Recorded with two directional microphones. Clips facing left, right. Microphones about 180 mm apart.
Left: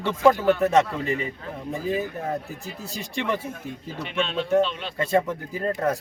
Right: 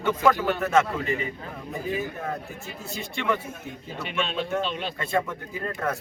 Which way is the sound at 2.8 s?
35° left (ahead or behind).